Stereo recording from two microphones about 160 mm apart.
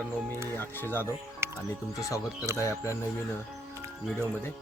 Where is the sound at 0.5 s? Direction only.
15° left (ahead or behind).